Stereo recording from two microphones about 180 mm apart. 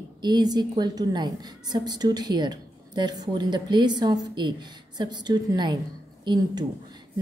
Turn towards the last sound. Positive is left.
turn(degrees=-25)  # may be behind; listen again after turning